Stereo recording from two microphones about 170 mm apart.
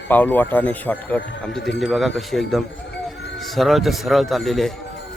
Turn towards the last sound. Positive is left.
turn(degrees=0)  # may be behind; listen again after turning